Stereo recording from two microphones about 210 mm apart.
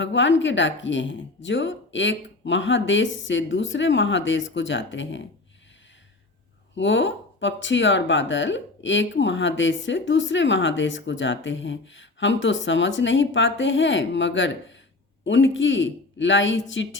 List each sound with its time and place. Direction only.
0.0 s speech: 60° left (ahead or behind)
6.7 s speech: 60° left (ahead or behind)